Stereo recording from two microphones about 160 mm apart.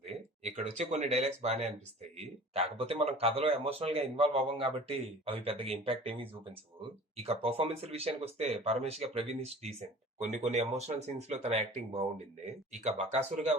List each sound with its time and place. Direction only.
0.1 s a sound: 45° right (ahead or behind)
1.0 s speech: 45° right (ahead or behind)
7.2 s speech: 40° right (ahead or behind)